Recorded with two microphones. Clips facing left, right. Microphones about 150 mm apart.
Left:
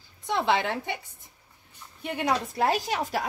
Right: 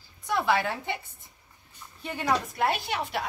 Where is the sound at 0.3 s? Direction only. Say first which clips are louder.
Left 1 dB; 25° left (ahead or behind).